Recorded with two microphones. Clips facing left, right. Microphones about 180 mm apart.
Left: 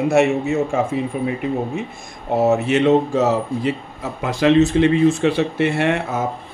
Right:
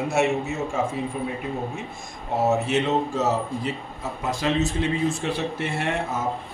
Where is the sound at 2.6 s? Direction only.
65° left (ahead or behind).